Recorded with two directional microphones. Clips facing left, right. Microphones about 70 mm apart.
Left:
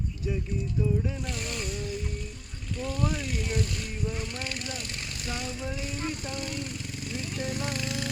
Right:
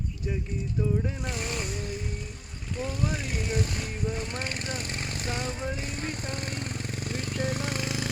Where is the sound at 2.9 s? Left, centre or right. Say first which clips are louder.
Left 2 dB; centre.